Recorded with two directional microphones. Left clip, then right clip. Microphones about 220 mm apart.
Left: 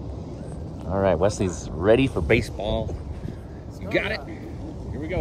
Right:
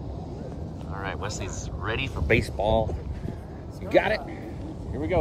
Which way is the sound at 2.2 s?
20° left (ahead or behind).